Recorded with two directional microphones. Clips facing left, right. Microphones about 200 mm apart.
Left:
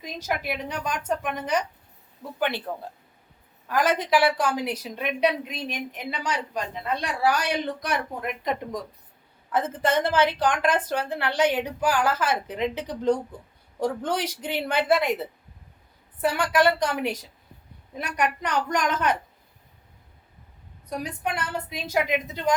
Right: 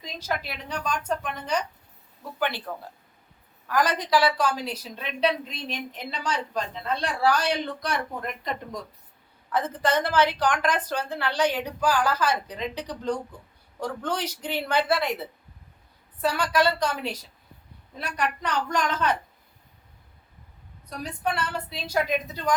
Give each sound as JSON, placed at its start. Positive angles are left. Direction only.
{"t": 0.0, "sound": "a woman's voice", "side_deg": 20}
{"t": 2.7, "sound": "a woman's voice", "side_deg": 25}
{"t": 16.2, "sound": "a woman's voice", "side_deg": 20}
{"t": 21.9, "sound": "a woman's voice", "side_deg": 20}